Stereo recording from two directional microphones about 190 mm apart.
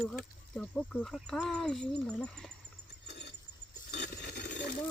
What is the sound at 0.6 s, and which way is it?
Speech, 5° left (ahead or behind).